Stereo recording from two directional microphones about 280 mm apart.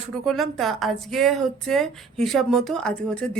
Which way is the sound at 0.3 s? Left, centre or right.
Centre.